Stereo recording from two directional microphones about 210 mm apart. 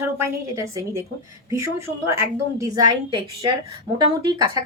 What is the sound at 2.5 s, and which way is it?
Speech, 15° right (ahead or behind).